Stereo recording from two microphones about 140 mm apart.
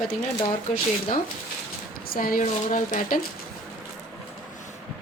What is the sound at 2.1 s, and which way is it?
A woman's voice, 90° left.